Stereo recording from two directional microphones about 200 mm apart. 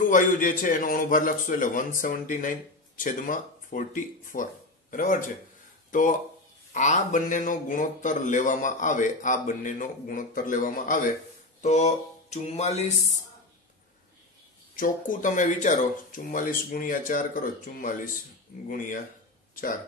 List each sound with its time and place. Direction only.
0.0 s a man's voice: 40° left (ahead or behind)
11.6 s music: 35° left (ahead or behind)
14.8 s a man's voice: 40° left (ahead or behind)